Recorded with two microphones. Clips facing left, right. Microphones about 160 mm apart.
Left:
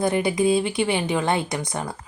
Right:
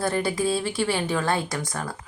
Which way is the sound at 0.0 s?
15° left (ahead or behind).